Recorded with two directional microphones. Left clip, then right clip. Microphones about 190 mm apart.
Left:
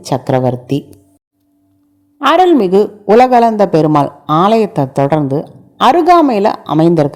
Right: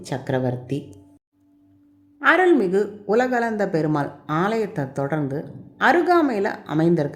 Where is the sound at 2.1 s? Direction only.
35° left (ahead or behind).